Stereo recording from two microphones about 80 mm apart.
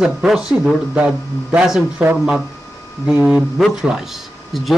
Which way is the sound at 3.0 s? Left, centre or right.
Centre.